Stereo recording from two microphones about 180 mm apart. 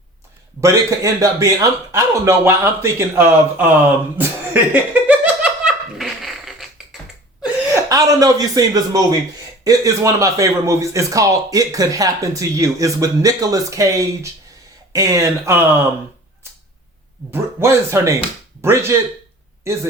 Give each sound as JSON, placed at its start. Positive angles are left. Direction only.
{"t": 0.6, "sound": "a man's voice", "side_deg": -15}
{"t": 4.2, "sound": "a sound", "side_deg": -10}
{"t": 4.7, "sound": "laughter", "side_deg": -10}
{"t": 7.4, "sound": "a man's voice", "side_deg": -15}
{"t": 17.3, "sound": "a man's voice", "side_deg": -15}